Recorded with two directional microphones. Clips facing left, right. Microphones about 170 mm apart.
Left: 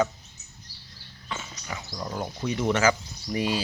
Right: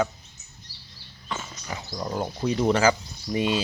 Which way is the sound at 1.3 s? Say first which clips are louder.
Right 2 dB; 35° right (ahead or behind).